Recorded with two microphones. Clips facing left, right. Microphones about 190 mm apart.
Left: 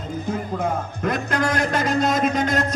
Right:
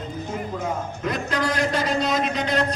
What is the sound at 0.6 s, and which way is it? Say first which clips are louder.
A man's voice: left 3 dB; 55° left (ahead or behind).